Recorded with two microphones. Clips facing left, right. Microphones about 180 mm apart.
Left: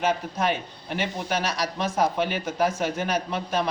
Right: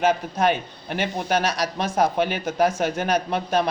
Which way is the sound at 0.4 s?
65° right (ahead or behind).